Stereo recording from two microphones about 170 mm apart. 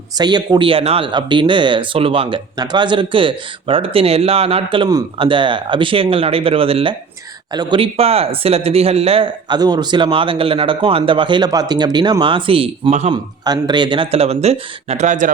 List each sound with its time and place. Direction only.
0.2 s speech: 25° right (ahead or behind)
13.4 s speech: 25° right (ahead or behind); by 15.3 s 45° right (ahead or behind)